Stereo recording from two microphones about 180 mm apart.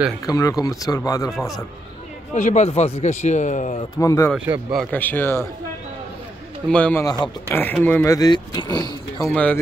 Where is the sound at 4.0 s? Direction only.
15° left (ahead or behind).